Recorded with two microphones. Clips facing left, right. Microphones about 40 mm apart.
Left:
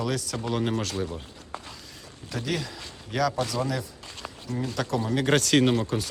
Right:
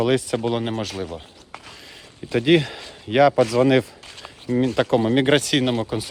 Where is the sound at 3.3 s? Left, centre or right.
Right.